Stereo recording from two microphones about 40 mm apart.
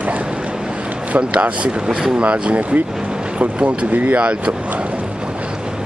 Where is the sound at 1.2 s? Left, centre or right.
Right.